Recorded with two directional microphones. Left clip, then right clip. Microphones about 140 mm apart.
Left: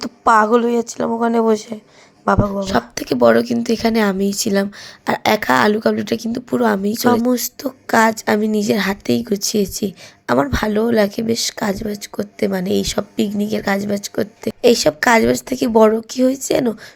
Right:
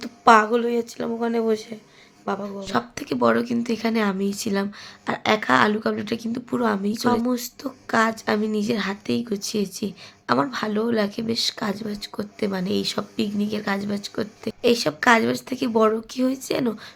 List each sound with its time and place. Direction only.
0.0 s a woman's voice: 40° left (ahead or behind)
2.2 s speech: 50° left (ahead or behind)
2.5 s a woman's voice: 30° left (ahead or behind)